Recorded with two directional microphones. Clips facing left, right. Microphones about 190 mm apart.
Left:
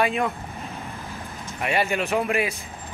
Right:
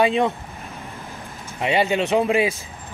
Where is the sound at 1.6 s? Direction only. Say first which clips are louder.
Right 4 dB; 25° right (ahead or behind).